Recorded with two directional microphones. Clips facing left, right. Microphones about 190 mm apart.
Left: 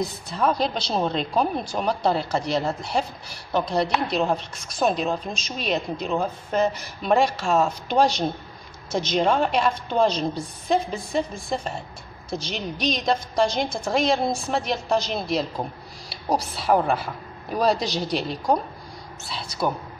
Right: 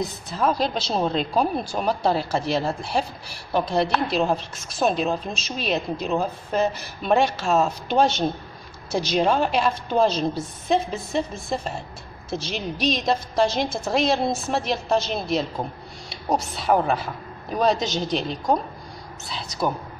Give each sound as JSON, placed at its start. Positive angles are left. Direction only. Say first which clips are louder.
{"t": 0.3, "sound": "a woman's voice", "louder": "even", "side_deg": 0}
{"t": 2.5, "sound": "speech", "louder": "even", "side_deg": -30}
{"t": 3.9, "sound": "a woman's voice", "louder": "right 1 dB", "side_deg": -5}